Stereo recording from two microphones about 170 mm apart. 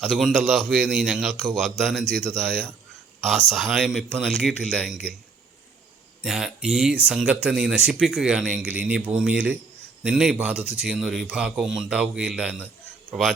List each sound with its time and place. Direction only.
0.0 s a man's voice: centre (ahead or behind)
6.2 s a man's voice: centre (ahead or behind)